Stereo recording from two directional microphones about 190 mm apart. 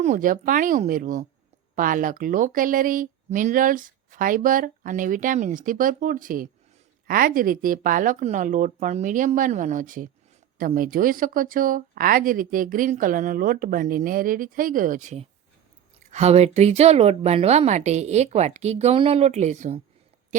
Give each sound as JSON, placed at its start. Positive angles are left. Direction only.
{"t": 0.0, "sound": "a woman's voice", "side_deg": -45}